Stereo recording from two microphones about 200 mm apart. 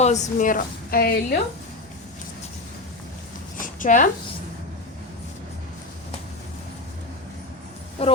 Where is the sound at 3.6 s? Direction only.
40° left (ahead or behind).